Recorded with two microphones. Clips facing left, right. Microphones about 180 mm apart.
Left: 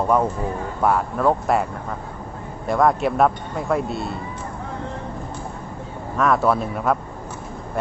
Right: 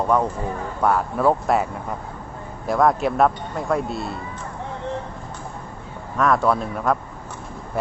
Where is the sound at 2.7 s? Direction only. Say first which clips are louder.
Even; centre (ahead or behind).